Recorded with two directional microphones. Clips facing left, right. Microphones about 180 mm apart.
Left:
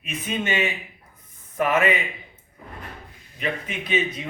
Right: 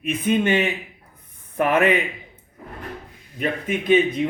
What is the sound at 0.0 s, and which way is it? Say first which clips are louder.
A man's voice: right 8 dB; 55° right (ahead or behind).